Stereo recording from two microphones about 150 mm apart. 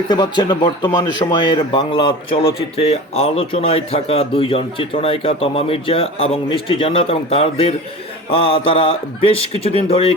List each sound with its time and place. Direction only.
0.1 s speech: 30° left (ahead or behind)